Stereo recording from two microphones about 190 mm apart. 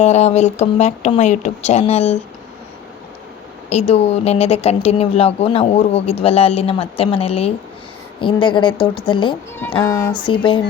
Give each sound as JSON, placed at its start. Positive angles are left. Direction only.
{"t": 0.0, "sound": "speech", "side_deg": 35}
{"t": 3.7, "sound": "a woman's voice", "side_deg": 35}
{"t": 9.8, "sound": "speech", "side_deg": 15}
{"t": 10.2, "sound": "a woman's voice", "side_deg": 25}